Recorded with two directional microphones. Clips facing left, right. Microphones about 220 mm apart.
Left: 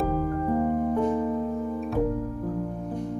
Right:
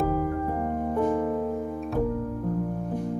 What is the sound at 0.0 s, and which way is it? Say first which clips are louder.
Keyboard: even; 10° right (ahead or behind).